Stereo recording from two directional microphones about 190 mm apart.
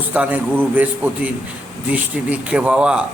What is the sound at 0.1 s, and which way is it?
A man's voice, 10° right (ahead or behind).